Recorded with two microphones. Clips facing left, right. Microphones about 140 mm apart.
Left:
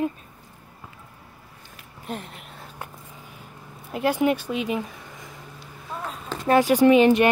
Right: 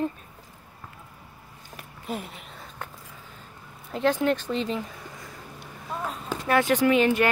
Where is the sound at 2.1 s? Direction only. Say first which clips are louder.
Even; centre (ahead or behind).